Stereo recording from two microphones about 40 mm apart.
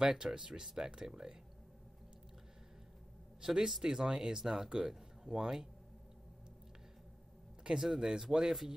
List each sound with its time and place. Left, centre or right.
0.0 s speech: centre
3.3 s a man's voice: centre
7.6 s speech: centre